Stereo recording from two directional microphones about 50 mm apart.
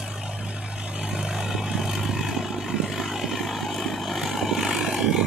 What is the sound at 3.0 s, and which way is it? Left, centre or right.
Vehicle, centre.